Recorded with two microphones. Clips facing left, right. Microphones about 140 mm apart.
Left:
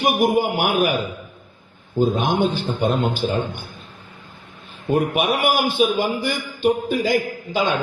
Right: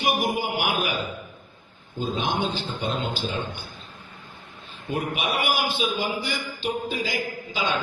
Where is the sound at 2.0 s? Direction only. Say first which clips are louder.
Left 8 dB; 50° left (ahead or behind).